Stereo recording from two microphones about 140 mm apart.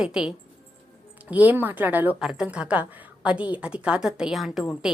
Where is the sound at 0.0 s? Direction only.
5° right (ahead or behind).